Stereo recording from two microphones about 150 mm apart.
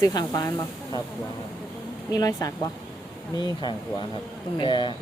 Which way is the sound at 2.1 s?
25° left (ahead or behind).